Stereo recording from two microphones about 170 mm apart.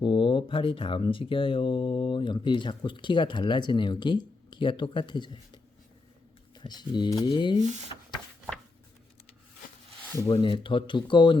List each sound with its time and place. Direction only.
0.0 s speech: 30° left (ahead or behind)
6.6 s speech: 25° left (ahead or behind)
10.2 s speech: 30° left (ahead or behind)